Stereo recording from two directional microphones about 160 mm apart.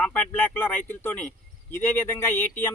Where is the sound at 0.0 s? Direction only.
10° left (ahead or behind).